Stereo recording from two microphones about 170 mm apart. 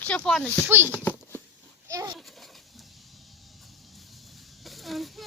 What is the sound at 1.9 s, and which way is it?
Speech, 20° right (ahead or behind).